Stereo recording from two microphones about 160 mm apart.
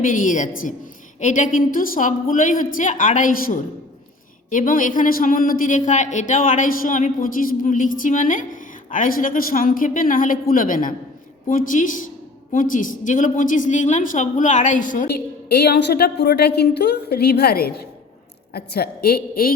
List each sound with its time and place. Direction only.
0.0 s a woman's voice: 55° left (ahead or behind)